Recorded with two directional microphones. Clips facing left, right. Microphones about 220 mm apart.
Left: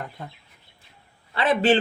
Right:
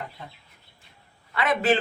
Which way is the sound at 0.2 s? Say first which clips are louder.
Left 4 dB; 50° left (ahead or behind).